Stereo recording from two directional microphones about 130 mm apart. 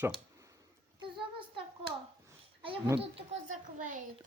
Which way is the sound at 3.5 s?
90° right.